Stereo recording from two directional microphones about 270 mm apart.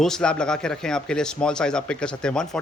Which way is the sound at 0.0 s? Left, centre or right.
Centre.